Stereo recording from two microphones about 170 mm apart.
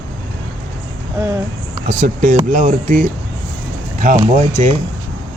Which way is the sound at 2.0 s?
50° right (ahead or behind).